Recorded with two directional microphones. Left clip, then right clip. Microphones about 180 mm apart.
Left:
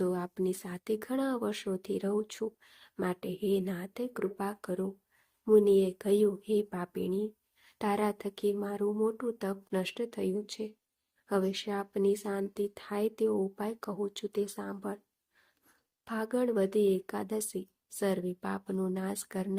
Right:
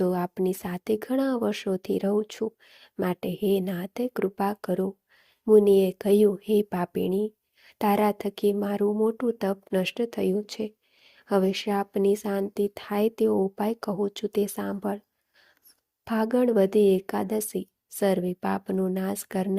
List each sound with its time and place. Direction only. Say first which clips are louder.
0.0 s speech: right 6 dB; 35° right (ahead or behind)
16.0 s speech: right 8 dB; 35° right (ahead or behind)